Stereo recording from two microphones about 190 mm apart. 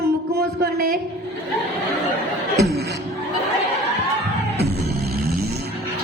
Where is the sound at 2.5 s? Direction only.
55° right (ahead or behind).